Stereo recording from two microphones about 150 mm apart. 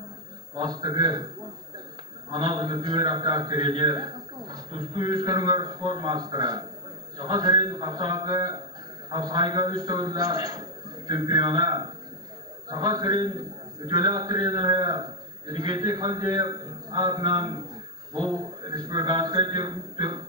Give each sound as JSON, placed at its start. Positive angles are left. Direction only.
{"t": 0.6, "sound": "a man's voice", "side_deg": -25}